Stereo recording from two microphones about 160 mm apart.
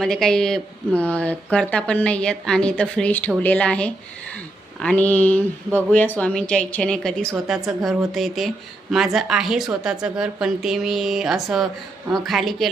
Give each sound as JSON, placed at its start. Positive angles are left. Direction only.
{"t": 0.0, "sound": "speech", "side_deg": 5}